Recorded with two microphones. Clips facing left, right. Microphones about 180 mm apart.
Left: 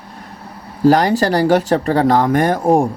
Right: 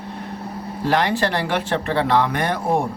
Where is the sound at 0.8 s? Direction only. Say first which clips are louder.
Left 7 dB; 40° left (ahead or behind).